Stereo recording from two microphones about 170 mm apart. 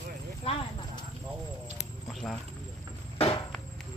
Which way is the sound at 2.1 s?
5° left (ahead or behind).